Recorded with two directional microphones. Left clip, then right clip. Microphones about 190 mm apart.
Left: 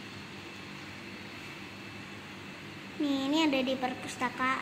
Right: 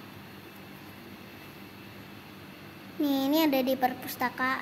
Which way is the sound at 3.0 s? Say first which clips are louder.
Right 3 dB; 40° right (ahead or behind).